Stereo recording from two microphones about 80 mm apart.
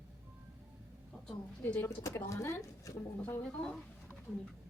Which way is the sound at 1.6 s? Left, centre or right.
Left.